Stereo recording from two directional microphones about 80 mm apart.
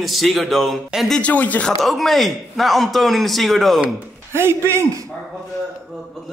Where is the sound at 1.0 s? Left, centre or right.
Centre.